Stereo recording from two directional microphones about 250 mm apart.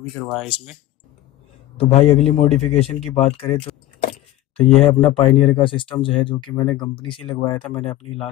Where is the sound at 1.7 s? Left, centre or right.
Left.